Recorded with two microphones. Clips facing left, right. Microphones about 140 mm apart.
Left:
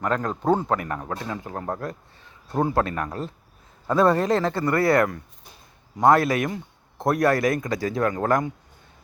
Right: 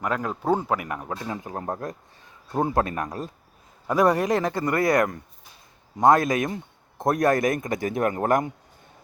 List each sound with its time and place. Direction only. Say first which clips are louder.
0.0 s a man's voice: left 2 dB; 10° right (ahead or behind)